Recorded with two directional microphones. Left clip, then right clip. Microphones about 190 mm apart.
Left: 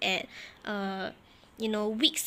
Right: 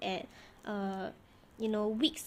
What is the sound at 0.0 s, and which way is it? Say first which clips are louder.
A woman's voice: left 8 dB; 20° left (ahead or behind).